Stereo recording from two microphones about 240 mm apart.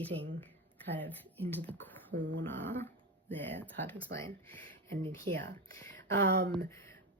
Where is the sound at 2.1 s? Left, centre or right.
Right.